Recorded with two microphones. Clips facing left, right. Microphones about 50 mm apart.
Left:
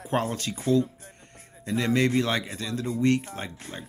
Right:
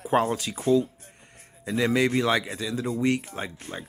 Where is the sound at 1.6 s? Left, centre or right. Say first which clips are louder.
Right 1 dB; centre.